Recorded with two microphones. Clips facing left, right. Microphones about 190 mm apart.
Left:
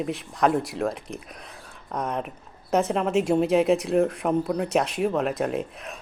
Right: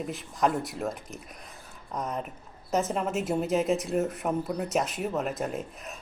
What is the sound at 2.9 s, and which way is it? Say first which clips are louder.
Speech: left 5 dB; 70° left (ahead or behind).